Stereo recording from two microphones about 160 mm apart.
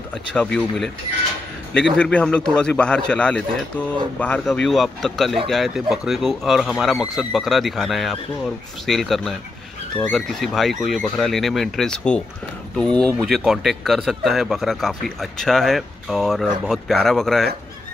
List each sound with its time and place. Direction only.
0.3 s a man's voice: 5° left (ahead or behind)